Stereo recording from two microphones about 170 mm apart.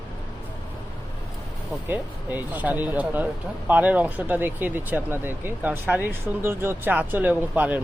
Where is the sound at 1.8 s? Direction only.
10° right (ahead or behind).